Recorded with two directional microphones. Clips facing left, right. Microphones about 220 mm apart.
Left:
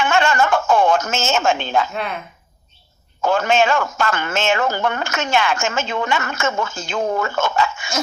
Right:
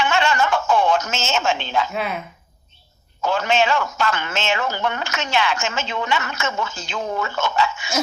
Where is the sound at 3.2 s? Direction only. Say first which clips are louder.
Left 3 dB; 50° left (ahead or behind).